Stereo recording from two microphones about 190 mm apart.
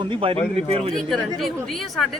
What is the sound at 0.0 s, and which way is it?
Speech, 25° right (ahead or behind).